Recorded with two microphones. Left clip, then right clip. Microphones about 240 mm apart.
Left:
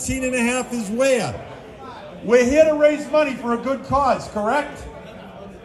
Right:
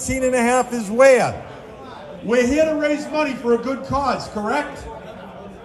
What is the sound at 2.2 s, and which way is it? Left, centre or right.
Speech, centre.